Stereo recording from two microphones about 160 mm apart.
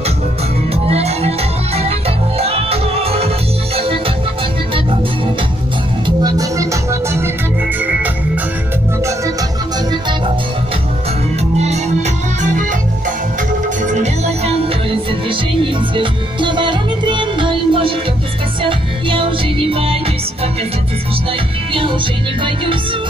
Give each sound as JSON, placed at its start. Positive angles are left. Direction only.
{"t": 0.8, "sound": "music", "side_deg": -40}
{"t": 6.0, "sound": "music", "side_deg": -25}
{"t": 11.5, "sound": "music", "side_deg": -40}
{"t": 13.8, "sound": "music", "side_deg": -45}